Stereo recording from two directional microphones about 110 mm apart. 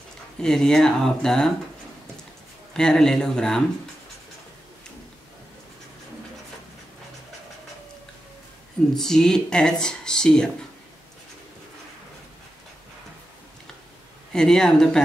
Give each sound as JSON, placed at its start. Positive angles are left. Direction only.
{"t": 0.4, "sound": "speech", "side_deg": 5}
{"t": 2.7, "sound": "speech", "side_deg": 5}
{"t": 8.9, "sound": "speech", "side_deg": 5}
{"t": 14.3, "sound": "speech", "side_deg": 5}